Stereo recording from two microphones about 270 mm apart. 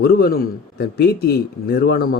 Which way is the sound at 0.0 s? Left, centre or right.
Left.